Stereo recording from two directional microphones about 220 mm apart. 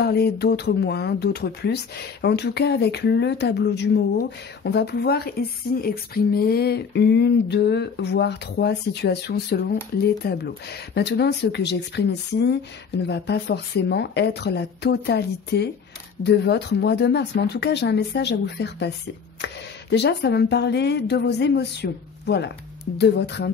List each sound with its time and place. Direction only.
0.0 s speech: 45° left (ahead or behind)